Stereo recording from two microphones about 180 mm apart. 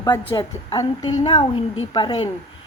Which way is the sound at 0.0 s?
20° left (ahead or behind).